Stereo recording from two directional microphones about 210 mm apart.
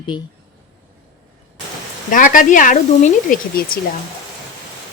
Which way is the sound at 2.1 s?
40° left (ahead or behind).